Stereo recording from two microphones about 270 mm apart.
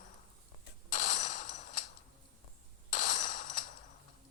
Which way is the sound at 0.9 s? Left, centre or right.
Left.